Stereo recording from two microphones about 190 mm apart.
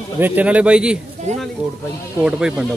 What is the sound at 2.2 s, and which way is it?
Speech, 5° right (ahead or behind).